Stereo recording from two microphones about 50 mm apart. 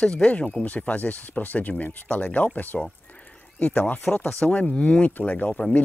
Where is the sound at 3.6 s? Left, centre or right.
Left.